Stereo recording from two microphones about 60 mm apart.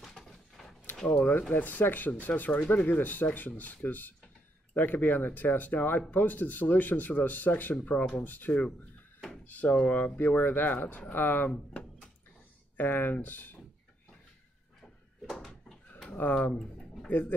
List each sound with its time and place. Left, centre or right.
0.0 s a sound: centre
0.9 s speech: centre
1.5 s speech: left
11.5 s drawer open or close: centre
12.7 s speech: left
14.8 s door: centre
16.1 s speech: left
16.5 s a sound: centre
17.1 s speech: left